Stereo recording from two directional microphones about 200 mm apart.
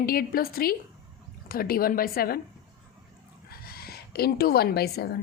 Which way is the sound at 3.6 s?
50° left (ahead or behind).